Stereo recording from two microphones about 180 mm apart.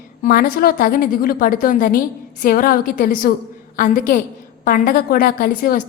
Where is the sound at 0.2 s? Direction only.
55° left (ahead or behind).